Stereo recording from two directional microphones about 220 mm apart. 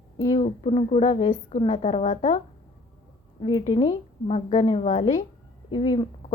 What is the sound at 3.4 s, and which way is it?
A woman's voice, 25° left (ahead or behind).